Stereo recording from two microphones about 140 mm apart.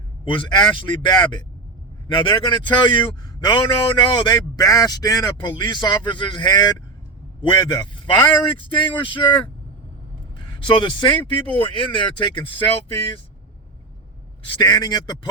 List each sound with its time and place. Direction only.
0.3 s a man's voice: 35° left (ahead or behind)
14.4 s speech: 30° left (ahead or behind)